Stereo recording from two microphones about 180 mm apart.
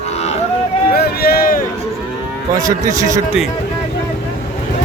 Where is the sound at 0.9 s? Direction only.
60° left (ahead or behind).